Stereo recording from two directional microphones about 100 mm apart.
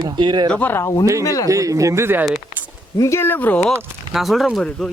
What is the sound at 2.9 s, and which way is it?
Speech, 30° left (ahead or behind).